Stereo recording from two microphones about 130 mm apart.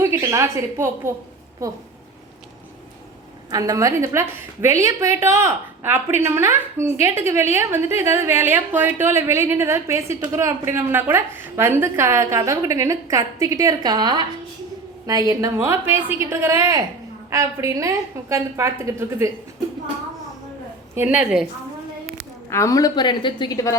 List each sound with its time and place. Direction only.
0.0 s a woman's voice: 20° right (ahead or behind)
3.5 s a woman's voice: 25° right (ahead or behind)
20.9 s a woman's voice: 15° right (ahead or behind)
22.4 s a woman's voice: 20° left (ahead or behind)